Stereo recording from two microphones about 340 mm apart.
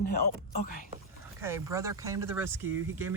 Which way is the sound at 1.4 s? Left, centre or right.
Centre.